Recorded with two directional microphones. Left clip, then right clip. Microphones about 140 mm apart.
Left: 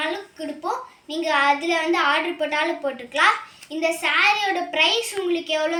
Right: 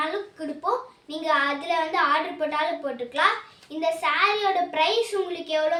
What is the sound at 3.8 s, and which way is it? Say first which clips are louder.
Speech: left 3 dB; 35° right (ahead or behind).